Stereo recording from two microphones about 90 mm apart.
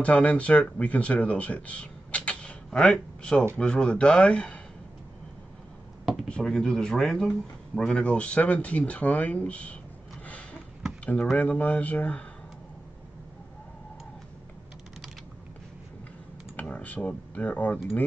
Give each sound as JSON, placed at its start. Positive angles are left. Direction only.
{"t": 0.0, "sound": "speech", "side_deg": 15}
{"t": 6.2, "sound": "speech", "side_deg": 10}
{"t": 10.2, "sound": "a sound", "side_deg": 15}
{"t": 11.3, "sound": "speech", "side_deg": 15}
{"t": 16.5, "sound": "speech", "side_deg": 15}